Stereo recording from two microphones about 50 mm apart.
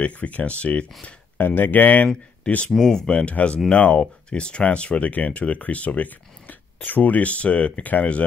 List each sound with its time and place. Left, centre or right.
0.0 s speech: left
1.4 s speech: left
2.4 s speech: left
2.8 s speech: centre; by 8.2 s left